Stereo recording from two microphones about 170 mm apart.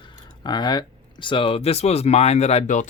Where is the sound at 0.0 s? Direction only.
25° left (ahead or behind).